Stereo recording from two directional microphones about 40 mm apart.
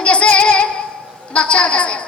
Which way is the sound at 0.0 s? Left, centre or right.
Left.